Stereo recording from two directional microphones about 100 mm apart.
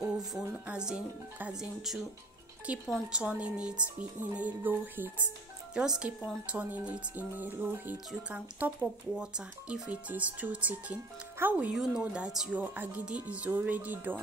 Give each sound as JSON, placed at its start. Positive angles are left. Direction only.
{"t": 0.3, "sound": "speech", "side_deg": -5}
{"t": 5.8, "sound": "speech", "side_deg": -10}
{"t": 11.7, "sound": "speech", "side_deg": -5}
{"t": 12.5, "sound": "speech", "side_deg": -15}